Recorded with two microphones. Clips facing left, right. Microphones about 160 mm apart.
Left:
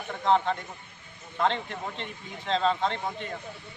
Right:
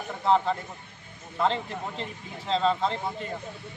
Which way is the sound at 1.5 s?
35° right (ahead or behind).